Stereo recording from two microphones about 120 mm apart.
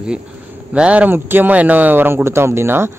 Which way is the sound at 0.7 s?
10° right (ahead or behind).